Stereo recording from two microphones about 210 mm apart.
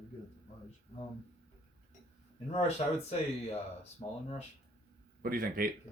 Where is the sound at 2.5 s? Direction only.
30° left (ahead or behind).